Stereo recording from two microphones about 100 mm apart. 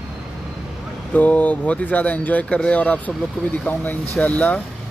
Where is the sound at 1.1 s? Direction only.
15° left (ahead or behind).